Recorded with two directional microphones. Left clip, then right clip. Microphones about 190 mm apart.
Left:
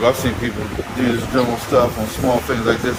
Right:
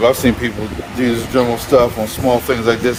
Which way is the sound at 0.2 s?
55° right (ahead or behind).